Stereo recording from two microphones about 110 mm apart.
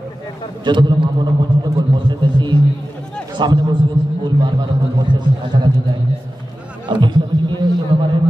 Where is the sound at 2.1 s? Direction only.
45° right (ahead or behind).